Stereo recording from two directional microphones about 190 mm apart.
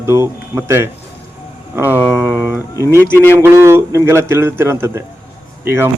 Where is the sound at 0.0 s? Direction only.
15° right (ahead or behind).